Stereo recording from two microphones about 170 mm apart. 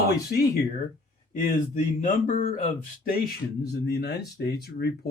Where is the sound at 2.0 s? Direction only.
50° left (ahead or behind).